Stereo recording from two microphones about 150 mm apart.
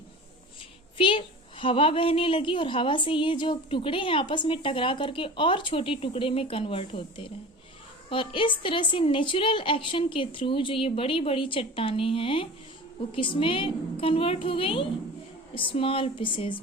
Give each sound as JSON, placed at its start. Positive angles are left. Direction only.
{"t": 0.9, "sound": "a woman's voice", "side_deg": 35}
{"t": 8.1, "sound": "a woman's voice", "side_deg": 35}